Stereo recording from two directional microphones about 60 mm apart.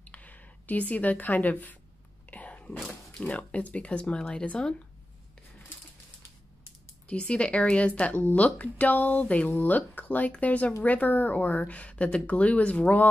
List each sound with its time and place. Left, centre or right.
0.0 s speech: left
2.2 s a sound: left
3.3 s speech: left
7.1 s speech: centre